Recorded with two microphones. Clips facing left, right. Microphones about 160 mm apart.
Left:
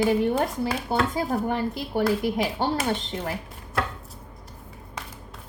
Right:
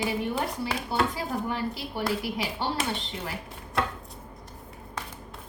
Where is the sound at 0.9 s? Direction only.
45° left (ahead or behind).